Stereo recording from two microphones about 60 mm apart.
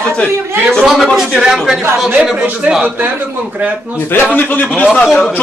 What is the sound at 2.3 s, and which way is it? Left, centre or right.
A man's voice, right.